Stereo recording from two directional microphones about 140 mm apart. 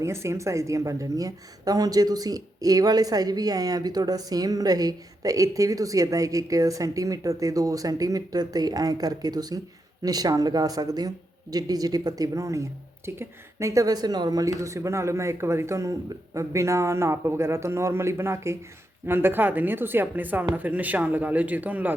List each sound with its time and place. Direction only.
0.0 s a woman's voice: 20° right (ahead or behind)